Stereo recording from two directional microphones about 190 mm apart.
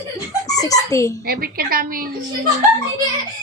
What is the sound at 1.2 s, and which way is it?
Speech, 50° right (ahead or behind).